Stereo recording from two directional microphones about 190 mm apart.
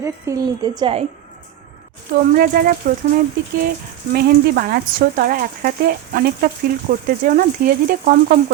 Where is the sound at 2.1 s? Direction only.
50° right (ahead or behind).